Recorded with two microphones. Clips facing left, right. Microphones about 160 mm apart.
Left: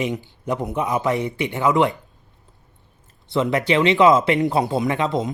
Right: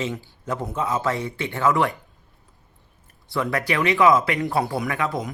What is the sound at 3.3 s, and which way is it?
Speech, 20° left (ahead or behind).